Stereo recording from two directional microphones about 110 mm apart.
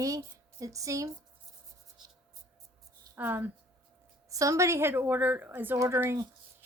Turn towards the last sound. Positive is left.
turn(degrees=-25)  # may be behind; listen again after turning